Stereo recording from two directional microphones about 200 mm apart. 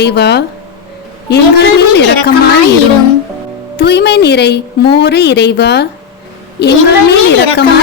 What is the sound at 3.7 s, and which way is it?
A woman's voice, 55° left (ahead or behind).